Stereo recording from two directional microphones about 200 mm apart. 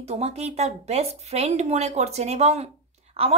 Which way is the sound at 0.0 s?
30° right (ahead or behind).